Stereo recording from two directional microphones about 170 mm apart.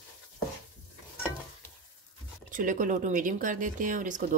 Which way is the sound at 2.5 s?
50° right (ahead or behind).